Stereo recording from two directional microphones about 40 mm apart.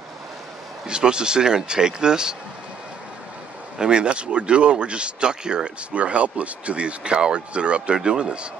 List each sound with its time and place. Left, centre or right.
0.8 s speech: right
3.7 s speech: right